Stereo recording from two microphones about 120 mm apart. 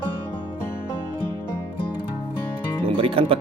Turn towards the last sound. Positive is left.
turn(degrees=-50)  # may be behind; listen again after turning